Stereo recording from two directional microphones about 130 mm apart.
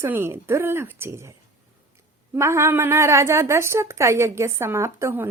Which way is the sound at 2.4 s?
20° right (ahead or behind).